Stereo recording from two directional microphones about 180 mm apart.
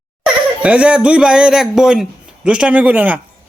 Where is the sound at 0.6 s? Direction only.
5° right (ahead or behind).